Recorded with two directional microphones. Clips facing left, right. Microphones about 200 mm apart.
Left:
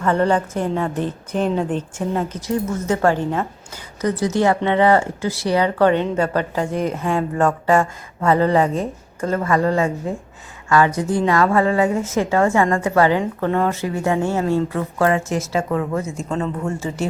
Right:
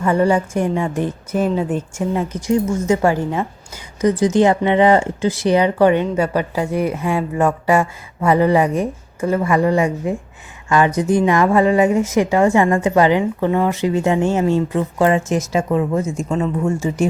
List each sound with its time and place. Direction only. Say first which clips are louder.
0.0 s speech: right 2 dB; 10° right (ahead or behind)